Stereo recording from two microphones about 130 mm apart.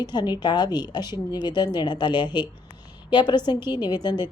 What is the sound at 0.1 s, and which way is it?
A woman's voice, 35° left (ahead or behind).